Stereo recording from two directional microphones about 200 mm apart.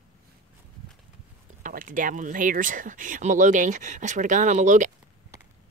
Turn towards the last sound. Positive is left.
turn(degrees=-40)  # may be behind; listen again after turning